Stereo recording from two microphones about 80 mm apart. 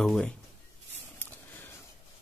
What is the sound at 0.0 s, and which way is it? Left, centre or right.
Speech, centre.